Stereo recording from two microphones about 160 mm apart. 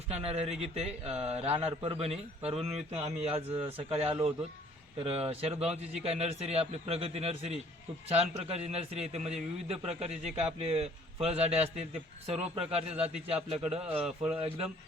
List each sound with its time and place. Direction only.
0.1 s a man's voice: 40° right (ahead or behind)
12.7 s a man's voice: 40° right (ahead or behind)
14.0 s speech: 5° right (ahead or behind)